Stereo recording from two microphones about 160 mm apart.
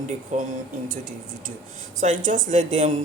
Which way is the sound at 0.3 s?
45° right (ahead or behind).